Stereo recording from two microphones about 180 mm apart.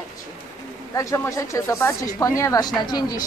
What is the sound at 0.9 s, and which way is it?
A woman's voice, 15° left (ahead or behind).